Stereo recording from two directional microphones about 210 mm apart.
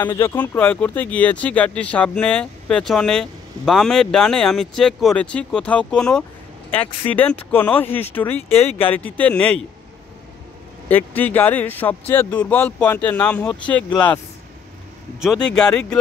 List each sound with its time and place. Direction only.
0.0 s speech: 10° left (ahead or behind)
8.4 s speech: 30° left (ahead or behind)
8.8 s speech: 10° left (ahead or behind)
10.9 s speech: 10° left (ahead or behind)
15.4 s speech: 5° left (ahead or behind)